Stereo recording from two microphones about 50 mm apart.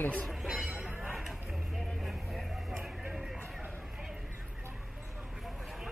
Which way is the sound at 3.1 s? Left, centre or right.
Centre.